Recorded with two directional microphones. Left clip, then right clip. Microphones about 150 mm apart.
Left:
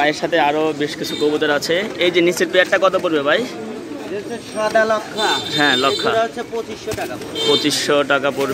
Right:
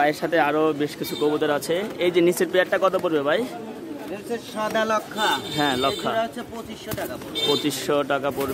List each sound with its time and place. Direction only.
0.0 s speech: 40° right (ahead or behind)
4.7 s speech: 55° right (ahead or behind)
5.6 s speech: 20° right (ahead or behind)
7.6 s a man's voice: 20° right (ahead or behind)